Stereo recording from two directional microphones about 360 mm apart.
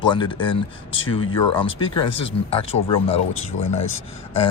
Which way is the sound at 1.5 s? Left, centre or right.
Centre.